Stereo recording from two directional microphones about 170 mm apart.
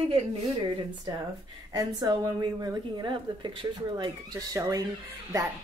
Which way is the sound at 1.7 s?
25° right (ahead or behind).